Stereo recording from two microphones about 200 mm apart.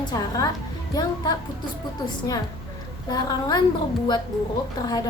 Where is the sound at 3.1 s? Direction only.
20° left (ahead or behind).